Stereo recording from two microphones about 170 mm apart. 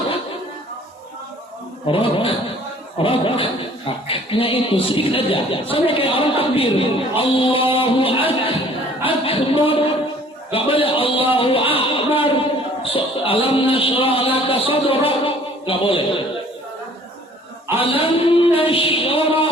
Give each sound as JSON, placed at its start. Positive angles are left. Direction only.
{"t": 1.9, "sound": "speech", "side_deg": 30}
{"t": 17.7, "sound": "speech", "side_deg": 30}